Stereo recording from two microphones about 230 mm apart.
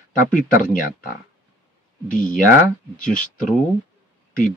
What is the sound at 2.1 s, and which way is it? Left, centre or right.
Speech, left.